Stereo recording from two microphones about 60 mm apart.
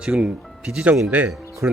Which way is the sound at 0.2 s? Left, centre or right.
Centre.